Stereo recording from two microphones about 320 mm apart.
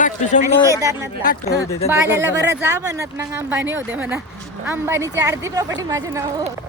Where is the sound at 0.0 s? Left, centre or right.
Left.